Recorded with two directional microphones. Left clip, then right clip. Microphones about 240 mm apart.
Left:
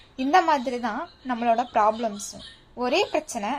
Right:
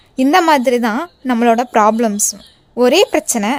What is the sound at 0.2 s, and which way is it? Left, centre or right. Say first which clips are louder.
A woman's voice: right 9 dB; right.